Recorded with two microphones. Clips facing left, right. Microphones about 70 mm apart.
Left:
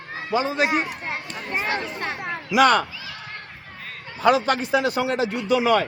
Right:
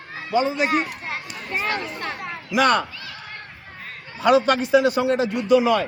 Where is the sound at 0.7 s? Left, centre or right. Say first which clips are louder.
Right 1 dB; centre.